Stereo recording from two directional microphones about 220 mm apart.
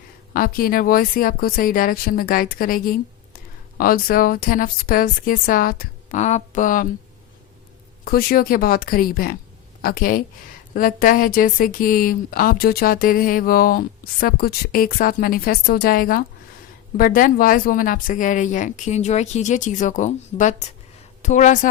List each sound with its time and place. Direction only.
0.3 s speech: 40° left (ahead or behind)
8.0 s speech: 40° left (ahead or behind)